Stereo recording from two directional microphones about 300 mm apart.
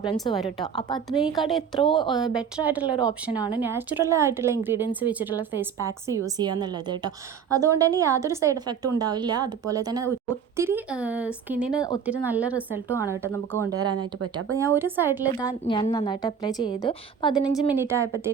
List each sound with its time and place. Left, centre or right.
0.0 s a woman's voice: centre
1.5 s speech: centre
1.8 s a woman's voice: centre
2.1 s a woman's voice: centre
15.3 s a woman's voice: centre
17.7 s a woman's voice: centre